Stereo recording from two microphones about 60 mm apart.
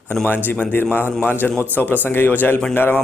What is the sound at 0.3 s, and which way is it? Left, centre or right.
A man's voice, left.